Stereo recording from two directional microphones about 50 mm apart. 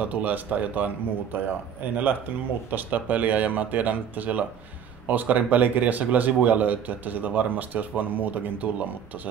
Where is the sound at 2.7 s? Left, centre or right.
Right.